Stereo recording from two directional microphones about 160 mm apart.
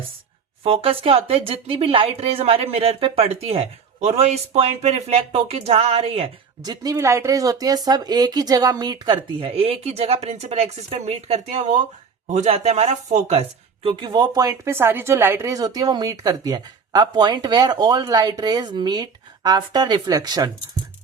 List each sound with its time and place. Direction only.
0.6 s speech: 35° right (ahead or behind)
6.6 s speech: 25° right (ahead or behind)